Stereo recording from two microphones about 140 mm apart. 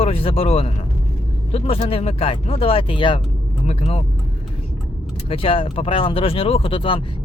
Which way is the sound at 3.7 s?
45° left (ahead or behind).